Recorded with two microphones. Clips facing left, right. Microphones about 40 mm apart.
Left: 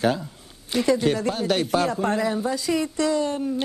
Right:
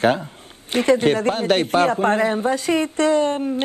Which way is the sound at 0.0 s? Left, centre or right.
Right.